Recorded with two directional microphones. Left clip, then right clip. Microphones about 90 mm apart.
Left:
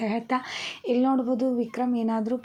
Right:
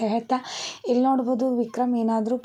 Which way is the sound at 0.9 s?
45° right (ahead or behind).